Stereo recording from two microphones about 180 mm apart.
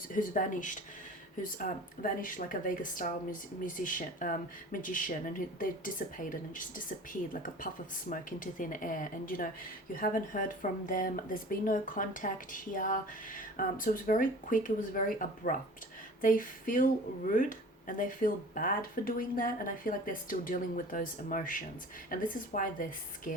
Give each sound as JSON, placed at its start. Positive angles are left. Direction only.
{"t": 0.1, "sound": "speech", "side_deg": 50}